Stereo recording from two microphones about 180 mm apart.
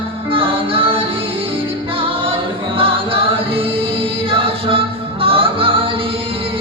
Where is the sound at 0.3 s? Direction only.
30° right (ahead or behind).